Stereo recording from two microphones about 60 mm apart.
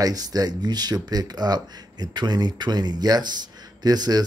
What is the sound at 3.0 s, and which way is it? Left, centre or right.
Speech, right.